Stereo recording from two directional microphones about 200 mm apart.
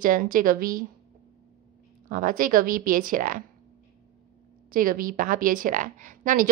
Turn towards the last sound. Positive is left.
turn(degrees=-40)  # may be behind; listen again after turning